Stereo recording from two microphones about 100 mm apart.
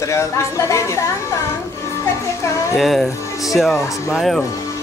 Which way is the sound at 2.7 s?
Centre (ahead or behind).